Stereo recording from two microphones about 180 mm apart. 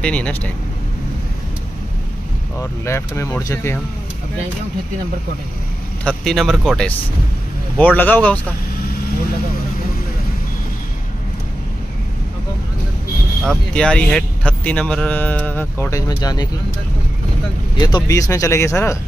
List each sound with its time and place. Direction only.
0.0 s speech: 5° left (ahead or behind)
2.8 s speech: 15° left (ahead or behind)
6.0 s speech: centre (ahead or behind)
13.4 s speech: 5° left (ahead or behind); by 16.4 s 20° left (ahead or behind)
17.7 s speech: 25° left (ahead or behind)